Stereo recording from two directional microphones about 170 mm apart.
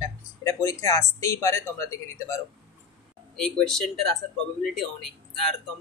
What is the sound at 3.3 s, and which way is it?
Speech, 5° left (ahead or behind).